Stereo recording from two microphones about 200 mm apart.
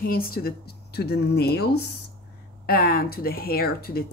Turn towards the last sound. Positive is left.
turn(degrees=50)  # may be behind; listen again after turning